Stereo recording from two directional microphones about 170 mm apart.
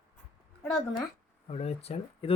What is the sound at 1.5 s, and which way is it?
Speech, 35° left (ahead or behind).